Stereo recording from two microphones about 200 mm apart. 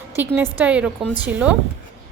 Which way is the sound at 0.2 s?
10° right (ahead or behind).